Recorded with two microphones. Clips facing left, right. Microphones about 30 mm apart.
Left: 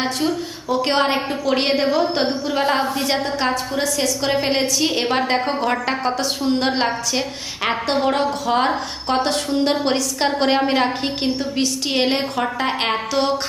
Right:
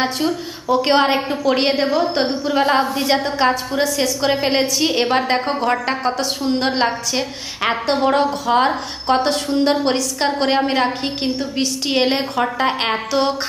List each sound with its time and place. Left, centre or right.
0.0 s a woman's voice: centre